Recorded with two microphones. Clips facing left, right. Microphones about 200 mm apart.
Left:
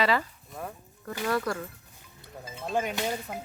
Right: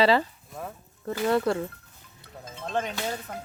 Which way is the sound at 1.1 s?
25° right (ahead or behind).